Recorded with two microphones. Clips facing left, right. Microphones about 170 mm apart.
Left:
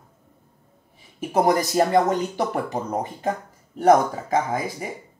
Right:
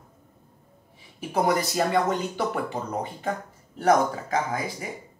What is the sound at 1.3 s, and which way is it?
Speech, 40° left (ahead or behind).